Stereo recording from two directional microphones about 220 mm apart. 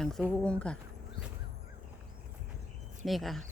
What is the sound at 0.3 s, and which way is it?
Speech, 5° left (ahead or behind).